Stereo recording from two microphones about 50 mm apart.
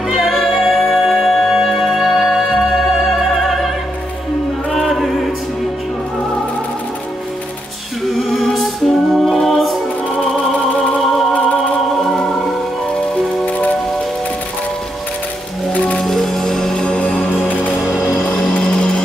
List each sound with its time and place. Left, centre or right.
0.1 s music: centre
4.7 s music: centre
8.1 s music: centre
16.0 s music: centre
18.6 s music: centre